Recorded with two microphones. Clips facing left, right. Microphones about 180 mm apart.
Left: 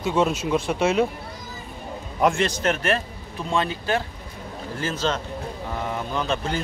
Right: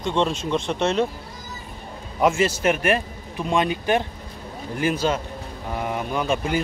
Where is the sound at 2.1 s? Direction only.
5° right (ahead or behind).